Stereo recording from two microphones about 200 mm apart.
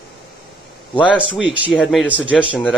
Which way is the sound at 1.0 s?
5° right (ahead or behind).